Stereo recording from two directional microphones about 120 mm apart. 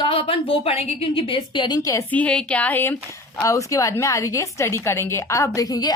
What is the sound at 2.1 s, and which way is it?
A woman's voice, 10° left (ahead or behind).